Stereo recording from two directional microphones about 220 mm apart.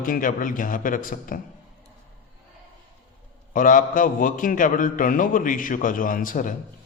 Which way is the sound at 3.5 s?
40° left (ahead or behind).